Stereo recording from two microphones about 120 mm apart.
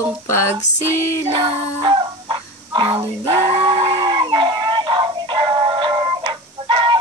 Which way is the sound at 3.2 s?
50° right (ahead or behind).